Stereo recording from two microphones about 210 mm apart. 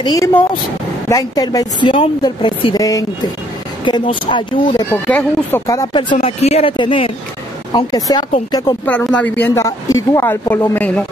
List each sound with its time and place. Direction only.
0.0 s a woman's voice: 15° left (ahead or behind)
5.0 s a woman's voice: 10° left (ahead or behind)
6.1 s speech: 30° left (ahead or behind)
8.8 s a woman's voice: 5° left (ahead or behind)